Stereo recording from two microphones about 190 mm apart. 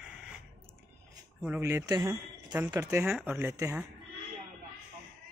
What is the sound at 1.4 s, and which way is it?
Speech, 10° right (ahead or behind).